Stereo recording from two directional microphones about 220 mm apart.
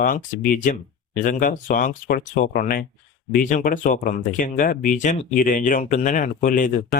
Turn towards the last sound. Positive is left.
turn(degrees=35)  # may be behind; listen again after turning